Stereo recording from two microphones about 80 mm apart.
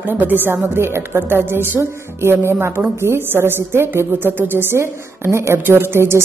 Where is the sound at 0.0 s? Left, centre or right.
Right.